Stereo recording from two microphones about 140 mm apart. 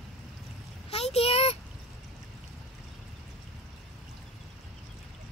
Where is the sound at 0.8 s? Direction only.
45° left (ahead or behind).